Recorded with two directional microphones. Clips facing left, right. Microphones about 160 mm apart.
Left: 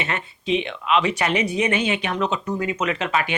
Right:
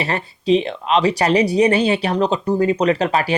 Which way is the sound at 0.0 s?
35° right (ahead or behind).